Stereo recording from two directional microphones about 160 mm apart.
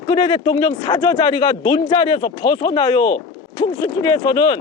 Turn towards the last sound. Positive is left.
turn(degrees=25)  # may be behind; listen again after turning